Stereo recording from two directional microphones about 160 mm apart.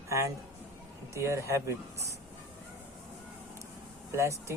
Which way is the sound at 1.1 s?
20° right (ahead or behind).